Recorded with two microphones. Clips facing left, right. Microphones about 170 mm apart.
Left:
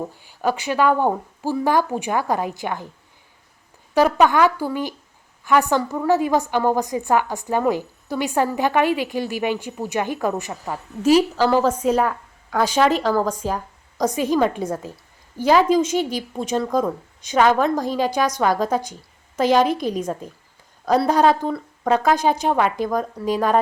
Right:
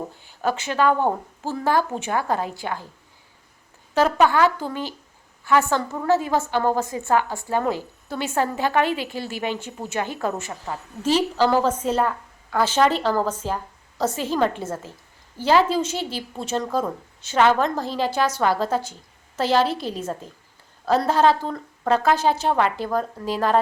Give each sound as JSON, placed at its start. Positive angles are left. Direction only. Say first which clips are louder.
{"t": 0.2, "sound": "a woman's voice", "louder": "left 1 dB", "side_deg": 10}
{"t": 3.9, "sound": "a woman's voice", "louder": "left 2 dB", "side_deg": 15}